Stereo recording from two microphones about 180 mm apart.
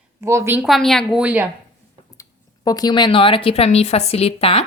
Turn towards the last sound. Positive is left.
turn(degrees=30)  # may be behind; listen again after turning